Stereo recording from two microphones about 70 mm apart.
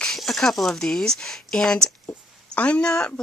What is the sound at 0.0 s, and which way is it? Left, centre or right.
Speech, centre.